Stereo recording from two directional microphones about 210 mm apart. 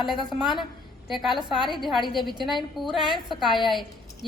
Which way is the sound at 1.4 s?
20° right (ahead or behind).